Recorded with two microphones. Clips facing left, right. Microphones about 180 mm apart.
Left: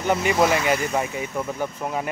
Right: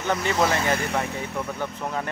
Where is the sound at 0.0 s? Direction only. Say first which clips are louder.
Left 3 dB; 10° left (ahead or behind).